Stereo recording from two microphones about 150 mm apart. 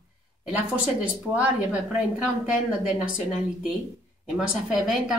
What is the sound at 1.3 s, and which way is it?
Speech, 10° right (ahead or behind).